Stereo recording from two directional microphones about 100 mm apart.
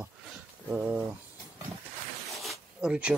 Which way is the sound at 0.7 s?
20° right (ahead or behind).